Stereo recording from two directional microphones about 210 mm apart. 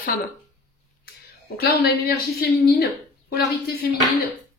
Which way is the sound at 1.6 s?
45° left (ahead or behind).